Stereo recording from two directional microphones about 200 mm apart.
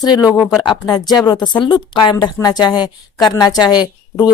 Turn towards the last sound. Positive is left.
turn(degrees=20)  # may be behind; listen again after turning